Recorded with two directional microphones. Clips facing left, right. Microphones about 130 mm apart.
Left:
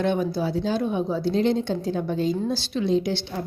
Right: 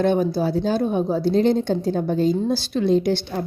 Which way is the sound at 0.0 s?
40° right (ahead or behind).